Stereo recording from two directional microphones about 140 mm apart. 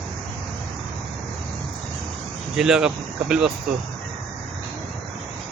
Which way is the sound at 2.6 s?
5° right (ahead or behind).